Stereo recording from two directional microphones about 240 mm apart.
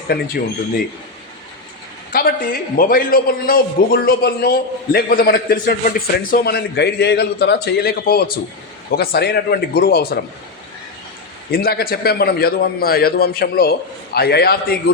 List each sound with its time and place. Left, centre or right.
2.1 s a man's voice: left
11.5 s a man's voice: left